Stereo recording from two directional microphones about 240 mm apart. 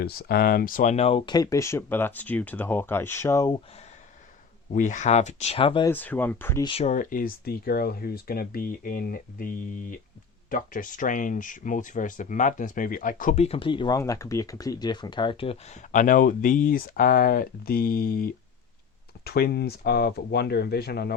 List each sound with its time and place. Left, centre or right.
0.0 s speech: left; by 3.6 s centre
4.7 s speech: left
5.9 s speech: centre
6.7 s speech: left